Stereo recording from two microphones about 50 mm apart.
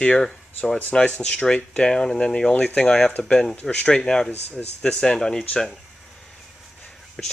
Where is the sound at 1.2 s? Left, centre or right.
Centre.